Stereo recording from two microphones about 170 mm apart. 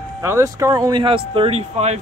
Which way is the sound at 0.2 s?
20° right (ahead or behind).